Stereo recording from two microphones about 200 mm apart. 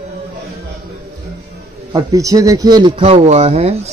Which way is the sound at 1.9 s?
15° right (ahead or behind).